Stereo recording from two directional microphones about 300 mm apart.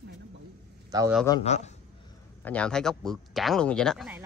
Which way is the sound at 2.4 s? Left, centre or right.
Centre.